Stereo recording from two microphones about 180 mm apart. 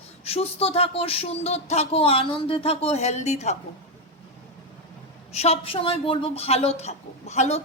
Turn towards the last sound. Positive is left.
turn(degrees=40)  # may be behind; listen again after turning